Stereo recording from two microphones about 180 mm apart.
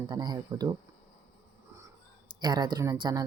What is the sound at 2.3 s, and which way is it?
Speech, 25° right (ahead or behind).